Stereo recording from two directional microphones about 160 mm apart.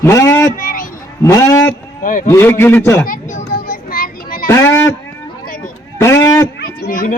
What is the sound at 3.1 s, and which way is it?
Children playing, 55° left (ahead or behind).